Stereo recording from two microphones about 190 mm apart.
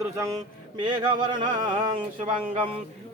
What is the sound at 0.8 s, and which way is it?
Speech, 25° right (ahead or behind).